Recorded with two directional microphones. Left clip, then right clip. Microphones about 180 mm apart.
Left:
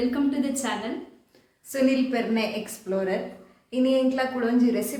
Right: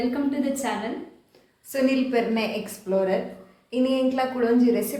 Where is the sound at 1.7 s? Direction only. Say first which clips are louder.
Right 1 dB; centre (ahead or behind).